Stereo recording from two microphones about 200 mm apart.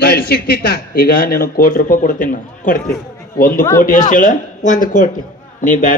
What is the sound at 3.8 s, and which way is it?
Speech, 40° left (ahead or behind).